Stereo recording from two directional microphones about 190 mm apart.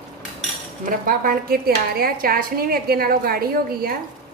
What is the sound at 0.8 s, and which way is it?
A woman's voice, 50° right (ahead or behind).